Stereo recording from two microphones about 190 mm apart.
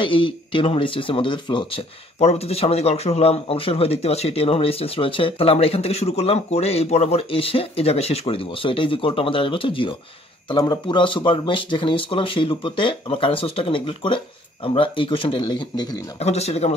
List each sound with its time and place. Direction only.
0.0 s speech: 25° left (ahead or behind)
16.2 s a man's voice: 35° left (ahead or behind)